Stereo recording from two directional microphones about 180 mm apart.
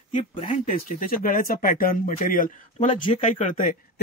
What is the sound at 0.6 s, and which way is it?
Speech, 50° left (ahead or behind).